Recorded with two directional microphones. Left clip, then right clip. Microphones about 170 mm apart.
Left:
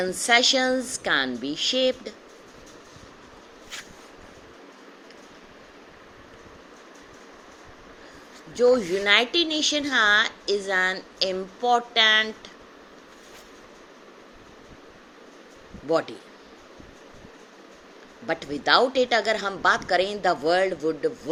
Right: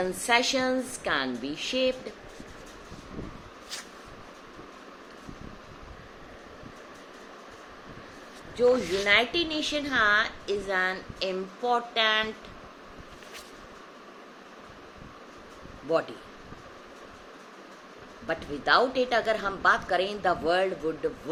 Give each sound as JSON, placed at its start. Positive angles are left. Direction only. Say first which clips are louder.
{"t": 0.0, "sound": "speech", "louder": "left 5 dB", "side_deg": 30}
{"t": 8.5, "sound": "speech", "louder": "left 4 dB", "side_deg": 40}
{"t": 15.9, "sound": "speech", "louder": "left 3 dB", "side_deg": 40}
{"t": 18.3, "sound": "speech", "louder": "left 3 dB", "side_deg": 35}